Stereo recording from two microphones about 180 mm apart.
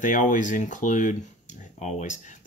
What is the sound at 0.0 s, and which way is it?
Speech, 45° left (ahead or behind).